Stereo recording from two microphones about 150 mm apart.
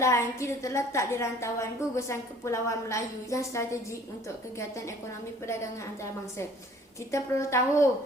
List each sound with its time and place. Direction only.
0.0 s a woman's voice: 20° left (ahead or behind)
7.1 s a woman's voice: 20° left (ahead or behind)